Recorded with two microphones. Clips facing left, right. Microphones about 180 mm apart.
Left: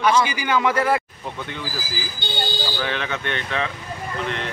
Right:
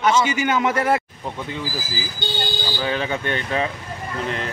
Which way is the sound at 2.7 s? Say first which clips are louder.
Right 3 dB; 35° right (ahead or behind).